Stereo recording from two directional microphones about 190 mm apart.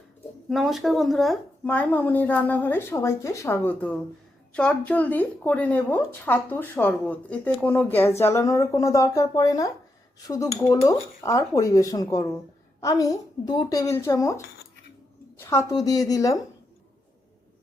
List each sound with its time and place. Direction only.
0.5 s speech: centre (ahead or behind); by 14.4 s 15° left (ahead or behind)
15.4 s a sound: 15° left (ahead or behind)
15.7 s speech: 20° left (ahead or behind)